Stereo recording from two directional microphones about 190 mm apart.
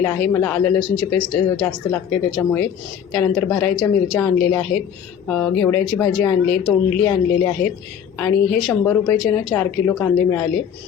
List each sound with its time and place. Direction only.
0.0 s a woman's voice: 10° left (ahead or behind)